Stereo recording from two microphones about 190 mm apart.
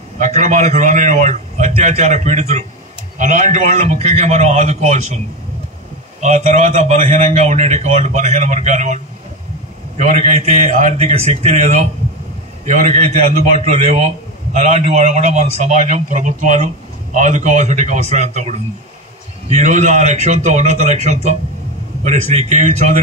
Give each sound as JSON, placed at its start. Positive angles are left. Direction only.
{"t": 0.2, "sound": "a man's voice", "side_deg": -40}
{"t": 6.2, "sound": "a man's voice", "side_deg": -40}